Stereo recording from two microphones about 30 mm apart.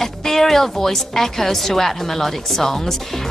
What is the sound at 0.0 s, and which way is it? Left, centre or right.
A woman's voice, centre.